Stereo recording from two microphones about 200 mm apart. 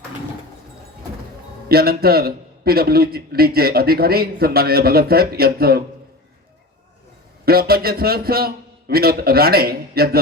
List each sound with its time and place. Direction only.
1.6 s a man's voice: 50° right (ahead or behind)
7.4 s a man's voice: 50° right (ahead or behind)